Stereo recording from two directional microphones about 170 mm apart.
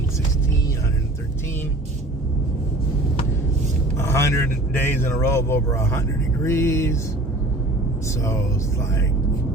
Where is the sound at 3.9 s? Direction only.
15° left (ahead or behind).